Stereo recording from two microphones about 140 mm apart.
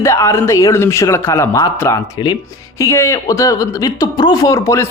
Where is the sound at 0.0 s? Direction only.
20° left (ahead or behind).